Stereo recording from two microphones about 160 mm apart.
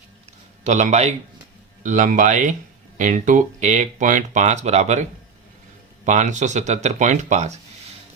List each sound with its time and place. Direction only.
0.6 s speech: 45° right (ahead or behind)
6.1 s speech: 50° right (ahead or behind)